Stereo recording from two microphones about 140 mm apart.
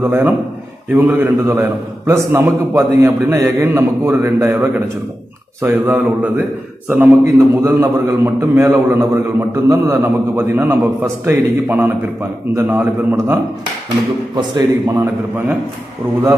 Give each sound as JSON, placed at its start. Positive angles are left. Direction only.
{"t": 0.0, "sound": "a man's voice", "side_deg": -15}
{"t": 14.3, "sound": "a man's voice", "side_deg": -30}
{"t": 15.0, "sound": "a man's voice", "side_deg": -15}